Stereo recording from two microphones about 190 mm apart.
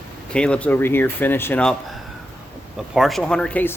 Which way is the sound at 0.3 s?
5° left (ahead or behind).